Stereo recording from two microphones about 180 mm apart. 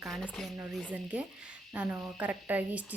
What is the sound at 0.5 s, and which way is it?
A woman's voice, 10° right (ahead or behind).